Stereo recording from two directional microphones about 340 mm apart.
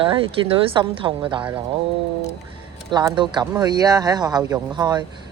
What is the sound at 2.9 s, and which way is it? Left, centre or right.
Speech, centre.